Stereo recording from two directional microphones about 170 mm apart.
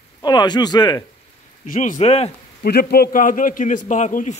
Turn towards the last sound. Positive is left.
turn(degrees=45)  # may be behind; listen again after turning